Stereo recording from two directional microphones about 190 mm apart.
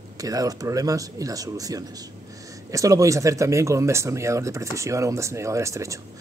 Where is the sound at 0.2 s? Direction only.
20° right (ahead or behind).